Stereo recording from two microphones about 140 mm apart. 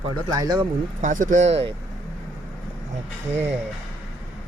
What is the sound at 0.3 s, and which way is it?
Speech, 30° right (ahead or behind).